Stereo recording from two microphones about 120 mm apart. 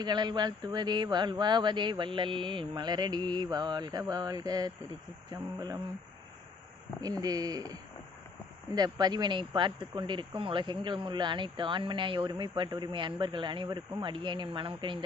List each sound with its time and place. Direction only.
0.0 s speech: 35° right (ahead or behind)
7.2 s speech: 30° right (ahead or behind)